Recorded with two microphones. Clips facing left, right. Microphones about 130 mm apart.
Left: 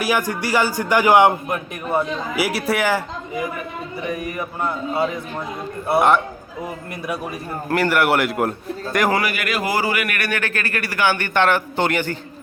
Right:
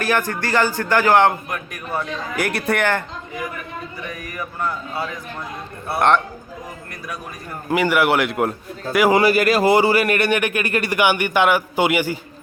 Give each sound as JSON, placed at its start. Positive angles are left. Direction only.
{"t": 0.0, "sound": "a man's voice", "side_deg": 10}
{"t": 4.1, "sound": "a man's voice", "side_deg": 25}
{"t": 7.7, "sound": "a man's voice", "side_deg": 0}
{"t": 9.1, "sound": "a man's voice", "side_deg": -35}